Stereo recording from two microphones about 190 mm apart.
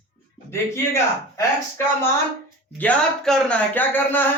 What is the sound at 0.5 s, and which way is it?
Speech, 15° left (ahead or behind).